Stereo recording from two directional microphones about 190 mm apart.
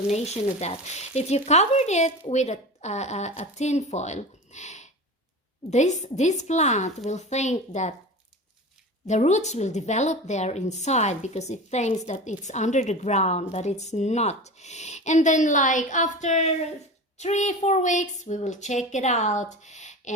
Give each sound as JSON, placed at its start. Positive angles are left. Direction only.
{"t": 0.1, "sound": "a woman's voice", "side_deg": 35}
{"t": 9.0, "sound": "a woman's voice", "side_deg": 35}